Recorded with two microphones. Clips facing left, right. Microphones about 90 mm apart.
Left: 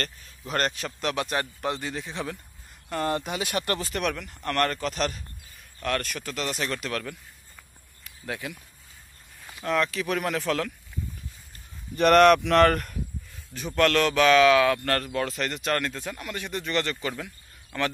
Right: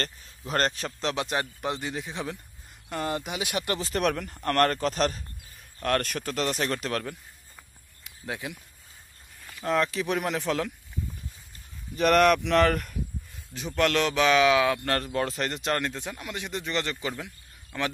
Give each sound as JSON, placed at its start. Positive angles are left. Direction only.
{"t": 0.5, "sound": "a man's voice", "side_deg": -35}
{"t": 3.9, "sound": "a man's voice", "side_deg": -40}
{"t": 8.0, "sound": "a sound", "side_deg": -20}
{"t": 9.6, "sound": "a man's voice", "side_deg": -30}
{"t": 10.1, "sound": "speech", "side_deg": -15}
{"t": 12.2, "sound": "speech", "side_deg": -5}
{"t": 13.7, "sound": "speech", "side_deg": -15}
{"t": 15.1, "sound": "speech", "side_deg": -30}
{"t": 15.7, "sound": "speech", "side_deg": -20}